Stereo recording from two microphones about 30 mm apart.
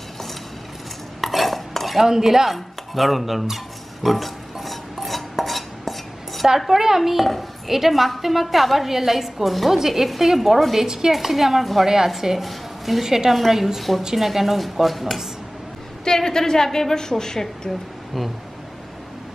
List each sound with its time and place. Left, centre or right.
1.2 s stir: centre
2.0 s speech: centre
4.0 s music: centre
5.3 s dishes: centre
6.7 s a woman's voice: centre
10.9 s a woman's voice: right
11.1 s a woman's voice: centre
11.8 s a woman's voice: centre
12.4 s a sound: centre
13.0 s a woman's voice: centre
13.3 s speech: centre
16.0 s a woman's voice: centre